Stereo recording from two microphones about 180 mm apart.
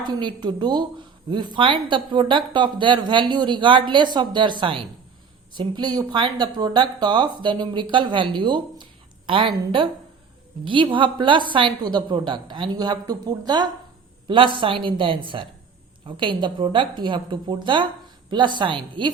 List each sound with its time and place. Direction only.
0.0 s a woman's voice: 25° right (ahead or behind)